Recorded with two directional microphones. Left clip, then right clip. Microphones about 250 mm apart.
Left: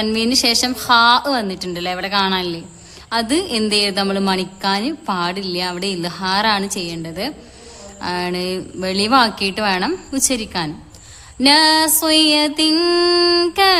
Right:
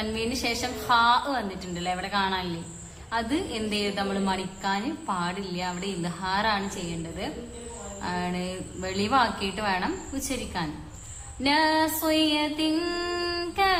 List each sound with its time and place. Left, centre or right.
0.0 s a woman's voice: left